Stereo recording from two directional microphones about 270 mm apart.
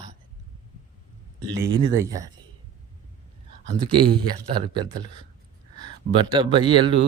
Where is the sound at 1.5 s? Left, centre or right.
Right.